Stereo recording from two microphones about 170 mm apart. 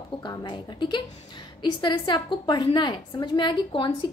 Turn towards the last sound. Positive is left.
turn(degrees=30)  # may be behind; listen again after turning